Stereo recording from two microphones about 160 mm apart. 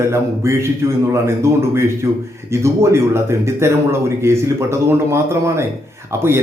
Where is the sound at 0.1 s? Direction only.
15° right (ahead or behind).